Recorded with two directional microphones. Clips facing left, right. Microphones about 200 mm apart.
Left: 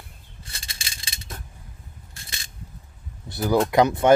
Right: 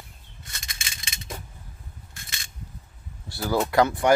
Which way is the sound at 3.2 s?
20° left (ahead or behind).